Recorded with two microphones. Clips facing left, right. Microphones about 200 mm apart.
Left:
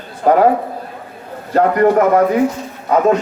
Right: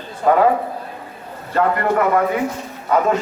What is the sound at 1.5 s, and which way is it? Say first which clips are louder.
Speech: left 6 dB; 45° left (ahead or behind).